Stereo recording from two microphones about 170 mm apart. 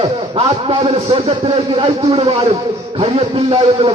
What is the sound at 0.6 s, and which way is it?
A man's voice, 35° right (ahead or behind).